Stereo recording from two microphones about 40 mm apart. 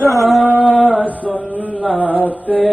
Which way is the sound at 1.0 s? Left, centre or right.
Right.